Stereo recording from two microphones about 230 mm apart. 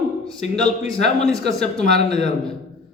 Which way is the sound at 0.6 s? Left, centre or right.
Left.